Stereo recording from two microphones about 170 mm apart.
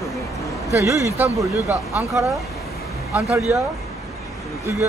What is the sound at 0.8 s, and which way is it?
Speech, 15° right (ahead or behind).